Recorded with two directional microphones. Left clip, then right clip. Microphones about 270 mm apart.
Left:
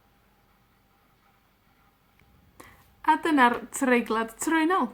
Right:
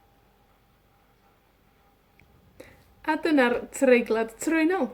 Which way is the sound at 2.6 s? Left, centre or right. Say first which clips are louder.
Left 2 dB; centre.